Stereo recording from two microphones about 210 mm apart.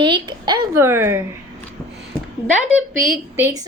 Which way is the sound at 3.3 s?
15° right (ahead or behind).